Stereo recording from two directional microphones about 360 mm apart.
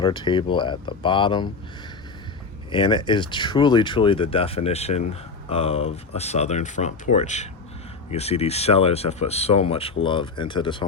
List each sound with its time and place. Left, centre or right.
0.0 s speech: centre
2.7 s speech: centre